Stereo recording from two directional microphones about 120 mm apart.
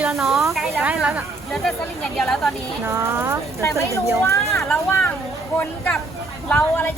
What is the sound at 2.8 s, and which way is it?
Speech, 20° right (ahead or behind).